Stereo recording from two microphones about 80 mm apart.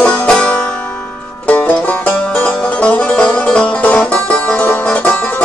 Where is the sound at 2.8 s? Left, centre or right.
Centre.